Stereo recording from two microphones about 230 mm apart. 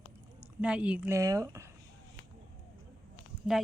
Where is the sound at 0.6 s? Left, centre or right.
Centre.